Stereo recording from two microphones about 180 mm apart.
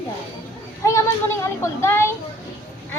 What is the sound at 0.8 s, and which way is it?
Speech, 15° left (ahead or behind).